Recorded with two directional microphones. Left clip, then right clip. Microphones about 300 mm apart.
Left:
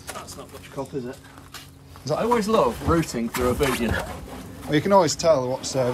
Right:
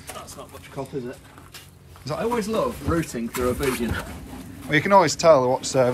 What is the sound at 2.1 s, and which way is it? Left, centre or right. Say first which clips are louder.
Speech: left 4 dB; centre.